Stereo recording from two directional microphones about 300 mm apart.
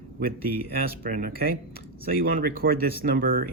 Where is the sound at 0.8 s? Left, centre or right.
Right.